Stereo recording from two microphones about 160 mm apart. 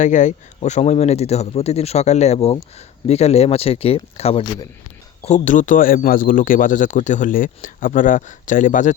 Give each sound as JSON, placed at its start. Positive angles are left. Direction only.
{"t": 0.0, "sound": "speech", "side_deg": 50}
{"t": 5.2, "sound": "speech", "side_deg": 50}